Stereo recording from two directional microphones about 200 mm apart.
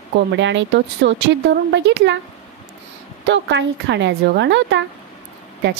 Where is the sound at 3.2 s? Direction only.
60° right (ahead or behind).